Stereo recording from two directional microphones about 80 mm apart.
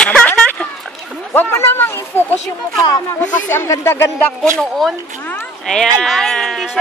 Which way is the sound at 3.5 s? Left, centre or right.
Left.